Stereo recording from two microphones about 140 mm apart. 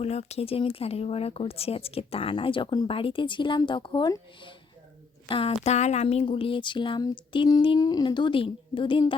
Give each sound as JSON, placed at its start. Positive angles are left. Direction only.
{"t": 0.0, "sound": "speech", "side_deg": 50}
{"t": 5.3, "sound": "speech", "side_deg": 45}